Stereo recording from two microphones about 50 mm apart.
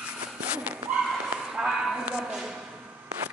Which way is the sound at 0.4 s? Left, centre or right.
Right.